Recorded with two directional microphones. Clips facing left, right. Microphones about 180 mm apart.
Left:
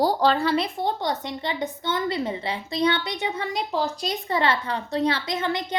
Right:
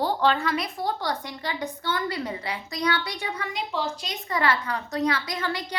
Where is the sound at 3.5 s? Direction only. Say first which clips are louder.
Left 3 dB; 40° left (ahead or behind).